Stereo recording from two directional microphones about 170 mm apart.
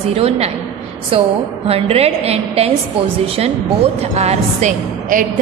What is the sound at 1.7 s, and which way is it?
A woman's voice, 35° right (ahead or behind).